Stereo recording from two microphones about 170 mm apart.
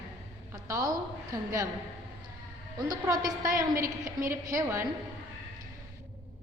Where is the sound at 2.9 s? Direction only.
20° right (ahead or behind).